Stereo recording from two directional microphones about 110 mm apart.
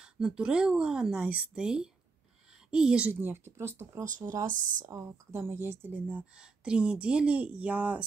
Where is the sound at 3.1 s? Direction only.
20° right (ahead or behind).